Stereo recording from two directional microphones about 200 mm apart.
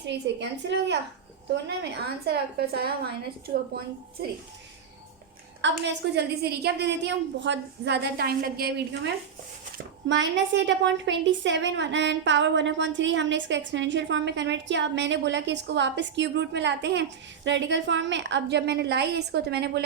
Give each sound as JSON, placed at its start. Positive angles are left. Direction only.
{"t": 0.0, "sound": "a woman's voice", "side_deg": -60}
{"t": 5.7, "sound": "a woman's voice", "side_deg": -60}